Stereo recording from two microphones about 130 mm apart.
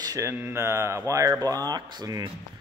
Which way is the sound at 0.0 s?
25° right (ahead or behind).